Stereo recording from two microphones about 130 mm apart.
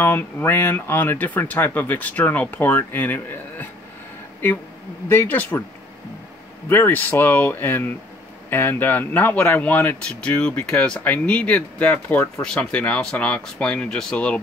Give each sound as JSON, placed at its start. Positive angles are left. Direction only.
{"t": 0.0, "sound": "speech", "side_deg": 15}
{"t": 5.0, "sound": "speech", "side_deg": 15}
{"t": 6.7, "sound": "speech", "side_deg": 15}